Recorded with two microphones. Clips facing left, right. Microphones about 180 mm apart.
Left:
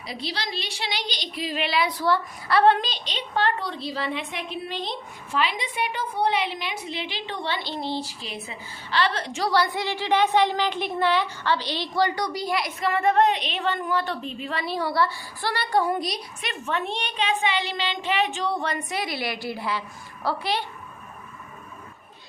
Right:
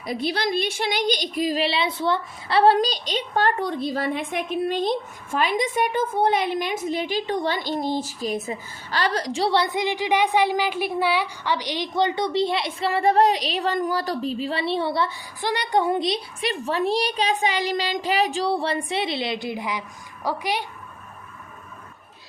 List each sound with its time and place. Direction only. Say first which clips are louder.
0.0 s a woman's voice: right 7 dB; 50° right (ahead or behind); by 2.7 s 30° right (ahead or behind)
2.7 s a woman's voice: right 8 dB; 40° right (ahead or behind); by 20.7 s 15° right (ahead or behind)